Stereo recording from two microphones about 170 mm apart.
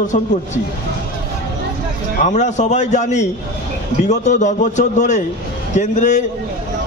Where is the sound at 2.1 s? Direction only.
45° left (ahead or behind).